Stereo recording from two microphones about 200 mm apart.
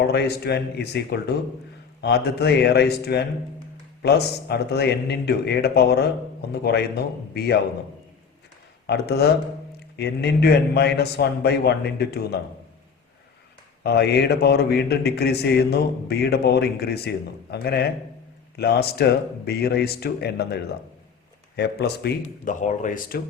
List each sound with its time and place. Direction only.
0.1 s a man's voice: 55° left (ahead or behind)
8.9 s speech: 55° left (ahead or behind)
13.8 s a man's voice: 55° left (ahead or behind)
22.6 s speech: 40° left (ahead or behind)